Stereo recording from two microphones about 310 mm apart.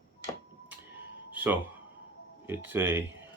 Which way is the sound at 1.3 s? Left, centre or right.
Centre.